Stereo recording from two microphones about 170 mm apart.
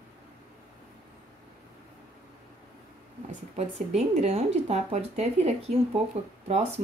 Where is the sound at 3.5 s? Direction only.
40° right (ahead or behind).